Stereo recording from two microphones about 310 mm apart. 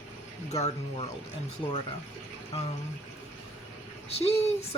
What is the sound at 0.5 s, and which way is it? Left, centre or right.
Speech, left.